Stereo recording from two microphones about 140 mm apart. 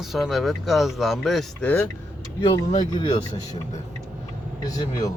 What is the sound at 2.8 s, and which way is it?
Speech, 35° left (ahead or behind).